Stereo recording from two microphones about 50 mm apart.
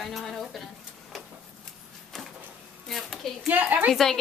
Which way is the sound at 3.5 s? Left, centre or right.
Right.